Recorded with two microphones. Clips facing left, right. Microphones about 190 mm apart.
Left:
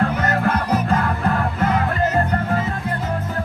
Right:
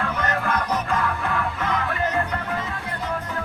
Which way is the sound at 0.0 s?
30° left (ahead or behind).